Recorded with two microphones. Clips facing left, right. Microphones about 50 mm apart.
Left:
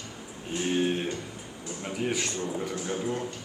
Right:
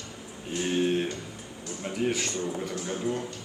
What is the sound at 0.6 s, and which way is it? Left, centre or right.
A man's voice, centre.